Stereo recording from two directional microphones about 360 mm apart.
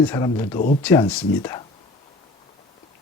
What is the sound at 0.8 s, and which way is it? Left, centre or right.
Speech, centre.